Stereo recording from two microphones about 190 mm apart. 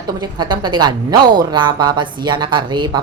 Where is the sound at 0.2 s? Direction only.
25° right (ahead or behind).